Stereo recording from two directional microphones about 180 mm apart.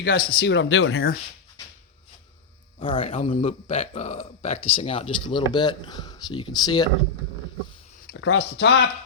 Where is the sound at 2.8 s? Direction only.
30° left (ahead or behind).